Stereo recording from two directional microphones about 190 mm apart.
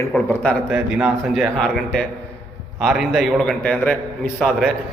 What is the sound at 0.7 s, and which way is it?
A man's voice, 5° right (ahead or behind).